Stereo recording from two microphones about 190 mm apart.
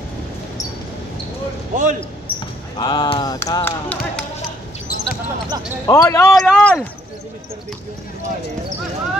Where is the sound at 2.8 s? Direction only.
25° left (ahead or behind).